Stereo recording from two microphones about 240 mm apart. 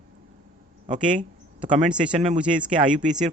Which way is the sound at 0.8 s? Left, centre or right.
Right.